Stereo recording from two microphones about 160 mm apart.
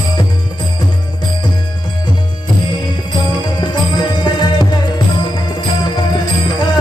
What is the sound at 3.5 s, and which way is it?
Music, 30° left (ahead or behind).